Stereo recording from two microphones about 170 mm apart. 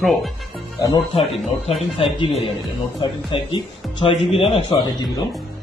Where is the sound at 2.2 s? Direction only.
35° left (ahead or behind).